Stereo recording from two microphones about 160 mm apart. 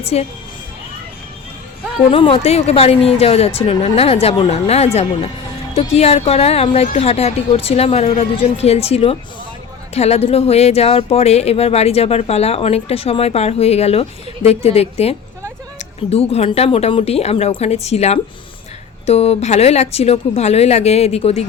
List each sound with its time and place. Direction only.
0.0 s speech: 40° left (ahead or behind)
2.0 s speech: 35° left (ahead or behind)